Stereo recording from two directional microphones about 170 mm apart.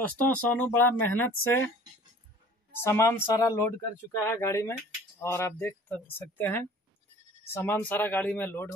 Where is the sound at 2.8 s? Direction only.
15° left (ahead or behind).